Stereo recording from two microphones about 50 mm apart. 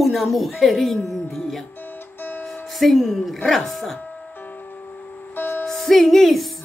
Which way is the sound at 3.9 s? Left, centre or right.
Left.